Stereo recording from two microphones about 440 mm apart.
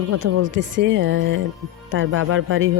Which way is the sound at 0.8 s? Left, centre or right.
Right.